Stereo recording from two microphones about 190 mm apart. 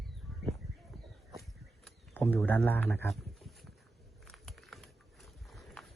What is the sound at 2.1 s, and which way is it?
Speech, 10° left (ahead or behind).